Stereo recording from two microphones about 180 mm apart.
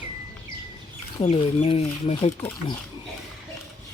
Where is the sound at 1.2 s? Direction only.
35° left (ahead or behind).